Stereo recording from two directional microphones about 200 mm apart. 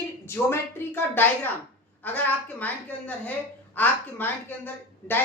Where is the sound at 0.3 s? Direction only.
10° left (ahead or behind).